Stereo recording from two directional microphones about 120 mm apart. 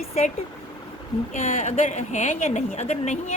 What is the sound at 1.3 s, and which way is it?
A woman's voice, 90° left.